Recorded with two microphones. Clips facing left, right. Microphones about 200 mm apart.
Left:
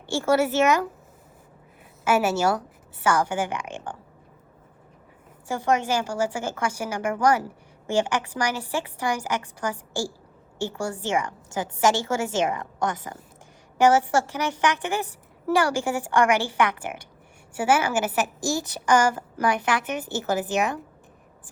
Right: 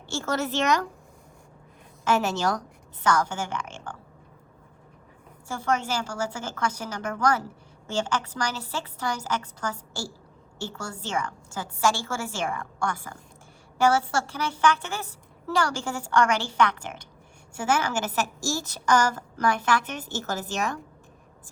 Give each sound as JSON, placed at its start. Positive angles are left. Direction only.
{"t": 0.1, "sound": "a woman's voice", "side_deg": 10}
{"t": 2.0, "sound": "a woman's voice", "side_deg": 10}
{"t": 5.5, "sound": "a woman's voice", "side_deg": 10}